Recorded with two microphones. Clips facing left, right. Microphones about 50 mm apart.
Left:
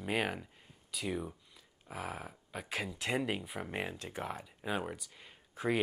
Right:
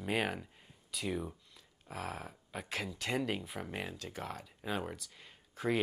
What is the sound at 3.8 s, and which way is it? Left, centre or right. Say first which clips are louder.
Speech: left 2 dB; left.